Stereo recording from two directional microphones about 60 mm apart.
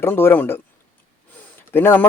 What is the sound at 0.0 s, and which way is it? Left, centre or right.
Speech, left.